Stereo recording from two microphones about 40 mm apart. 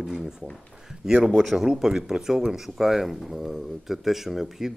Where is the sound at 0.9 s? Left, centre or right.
Centre.